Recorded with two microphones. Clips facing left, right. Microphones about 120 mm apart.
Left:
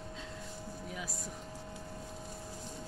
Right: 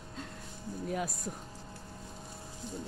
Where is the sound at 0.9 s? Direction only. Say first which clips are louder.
Right 10 dB; 50° right (ahead or behind).